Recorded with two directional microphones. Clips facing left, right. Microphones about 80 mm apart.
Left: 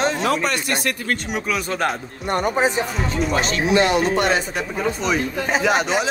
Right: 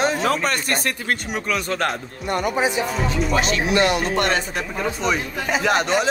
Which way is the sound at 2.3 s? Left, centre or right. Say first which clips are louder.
Left 2 dB; left.